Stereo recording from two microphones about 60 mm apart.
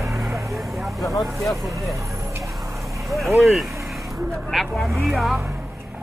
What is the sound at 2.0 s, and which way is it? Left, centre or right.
Vehicle, right.